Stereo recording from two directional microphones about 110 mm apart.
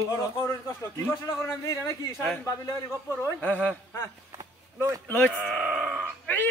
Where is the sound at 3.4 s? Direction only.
15° left (ahead or behind).